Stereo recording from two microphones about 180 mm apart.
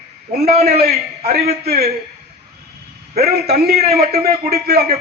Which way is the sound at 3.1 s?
60° right (ahead or behind).